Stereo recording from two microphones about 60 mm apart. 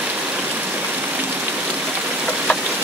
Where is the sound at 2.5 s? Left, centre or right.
Left.